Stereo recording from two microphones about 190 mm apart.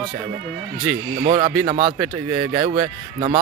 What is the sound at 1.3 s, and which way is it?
Speech, 25° right (ahead or behind).